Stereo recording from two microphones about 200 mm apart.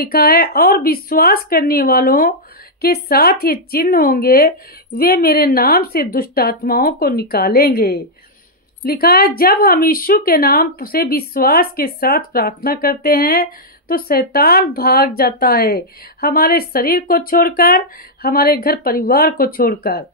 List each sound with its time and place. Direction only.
0.0 s speech: 50° left (ahead or behind)